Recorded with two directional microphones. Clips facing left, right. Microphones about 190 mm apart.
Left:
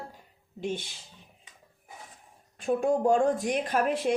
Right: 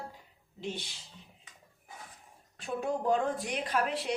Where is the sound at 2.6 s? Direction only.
50° left (ahead or behind).